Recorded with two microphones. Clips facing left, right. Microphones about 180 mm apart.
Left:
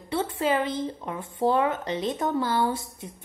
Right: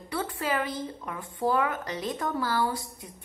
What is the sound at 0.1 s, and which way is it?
Speech, 25° left (ahead or behind).